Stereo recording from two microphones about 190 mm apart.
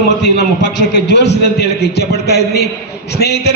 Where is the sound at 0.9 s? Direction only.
65° left (ahead or behind).